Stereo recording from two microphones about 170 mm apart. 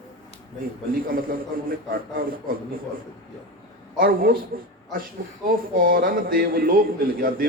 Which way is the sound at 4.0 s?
55° right (ahead or behind).